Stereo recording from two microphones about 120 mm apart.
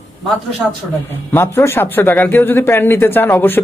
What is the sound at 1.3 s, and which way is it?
A man's voice, 20° left (ahead or behind).